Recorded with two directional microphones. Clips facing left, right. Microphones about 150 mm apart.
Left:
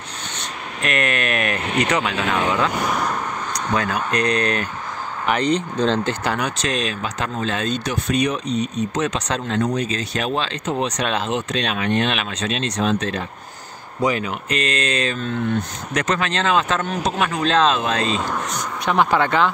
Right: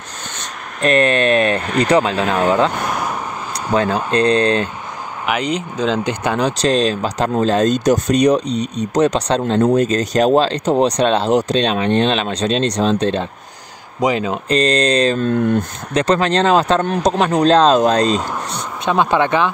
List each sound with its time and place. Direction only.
0.4 s speech: 35° right (ahead or behind)
2.7 s vehicle: centre (ahead or behind)
3.7 s speech: 25° right (ahead or behind)
5.2 s speech: 10° right (ahead or behind)
6.2 s speech: 25° right (ahead or behind)
9.7 s speech: 45° right (ahead or behind)
18.9 s speech: 20° right (ahead or behind)